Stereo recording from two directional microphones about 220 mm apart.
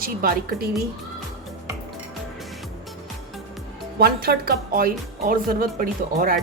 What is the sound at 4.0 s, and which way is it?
A woman's voice, 45° right (ahead or behind).